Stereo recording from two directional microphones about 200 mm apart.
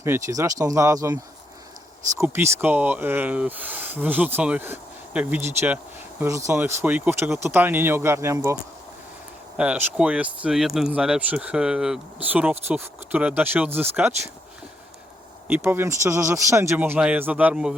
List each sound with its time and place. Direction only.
0.0 s speech: 15° right (ahead or behind)
9.6 s speech: 5° right (ahead or behind)
15.4 s speech: 10° right (ahead or behind)